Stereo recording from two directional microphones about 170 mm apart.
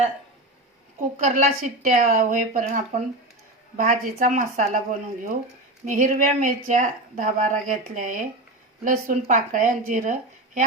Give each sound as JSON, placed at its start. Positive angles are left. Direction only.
{"t": 1.1, "sound": "speech", "side_deg": -45}